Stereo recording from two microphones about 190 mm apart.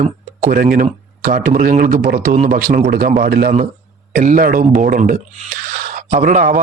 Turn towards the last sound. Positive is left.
turn(degrees=-45)  # may be behind; listen again after turning